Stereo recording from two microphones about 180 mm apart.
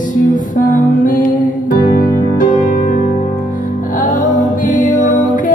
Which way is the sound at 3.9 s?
45° left (ahead or behind).